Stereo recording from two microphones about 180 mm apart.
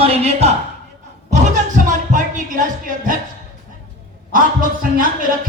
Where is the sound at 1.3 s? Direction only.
40° right (ahead or behind).